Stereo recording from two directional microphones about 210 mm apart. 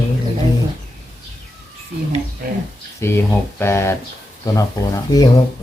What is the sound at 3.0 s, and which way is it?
Speech, 10° left (ahead or behind).